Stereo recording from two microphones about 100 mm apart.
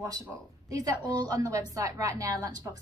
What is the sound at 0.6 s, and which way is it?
A woman's voice, 35° right (ahead or behind).